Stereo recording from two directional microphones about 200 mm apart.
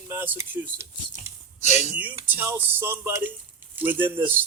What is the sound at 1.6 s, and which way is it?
Speech, 35° left (ahead or behind).